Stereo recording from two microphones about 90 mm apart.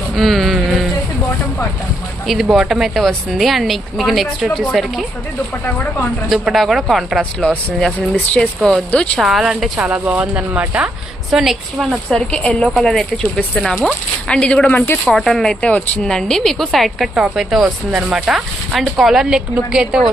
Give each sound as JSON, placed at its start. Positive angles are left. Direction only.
{"t": 0.2, "sound": "speech", "side_deg": 0}
{"t": 2.2, "sound": "speech", "side_deg": 0}
{"t": 5.6, "sound": "speech", "side_deg": 15}
{"t": 6.2, "sound": "speech", "side_deg": 0}
{"t": 9.1, "sound": "speech", "side_deg": -5}
{"t": 10.8, "sound": "speech", "side_deg": -5}
{"t": 12.1, "sound": "speech", "side_deg": 10}
{"t": 15.0, "sound": "speech", "side_deg": 5}
{"t": 15.7, "sound": "speech", "side_deg": 15}
{"t": 16.1, "sound": "speech", "side_deg": 5}